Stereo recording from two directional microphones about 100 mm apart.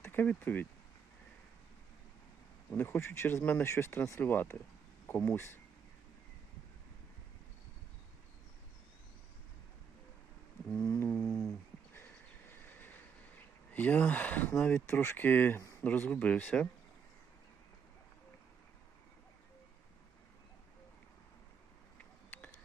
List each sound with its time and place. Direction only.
0.0 s speech: 20° left (ahead or behind)
2.7 s speech: 20° left (ahead or behind)
10.7 s a sound: 30° left (ahead or behind)
12.5 s vehicle: 20° left (ahead or behind)
13.7 s speech: 15° left (ahead or behind)
21.9 s a sound: 15° left (ahead or behind)